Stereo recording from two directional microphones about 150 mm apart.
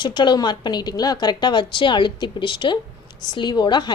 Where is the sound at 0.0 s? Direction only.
30° left (ahead or behind).